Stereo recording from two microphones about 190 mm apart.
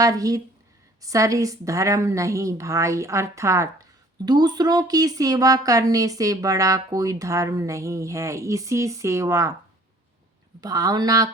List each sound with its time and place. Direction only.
0.0 s speech: 20° right (ahead or behind)
10.6 s speech: 20° right (ahead or behind)